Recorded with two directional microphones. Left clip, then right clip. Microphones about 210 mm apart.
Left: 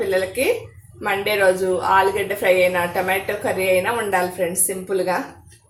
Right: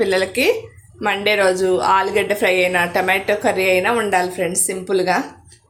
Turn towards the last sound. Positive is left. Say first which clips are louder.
# right 4 dB
turn(degrees=-45)  # may be behind; listen again after turning